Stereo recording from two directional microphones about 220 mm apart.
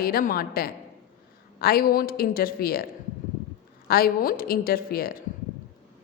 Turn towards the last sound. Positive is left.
turn(degrees=40)  # may be behind; listen again after turning